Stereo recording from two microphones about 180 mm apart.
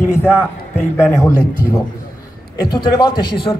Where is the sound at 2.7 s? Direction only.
25° left (ahead or behind).